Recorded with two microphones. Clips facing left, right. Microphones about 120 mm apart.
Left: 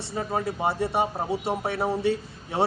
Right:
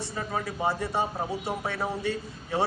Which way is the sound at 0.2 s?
30° left (ahead or behind).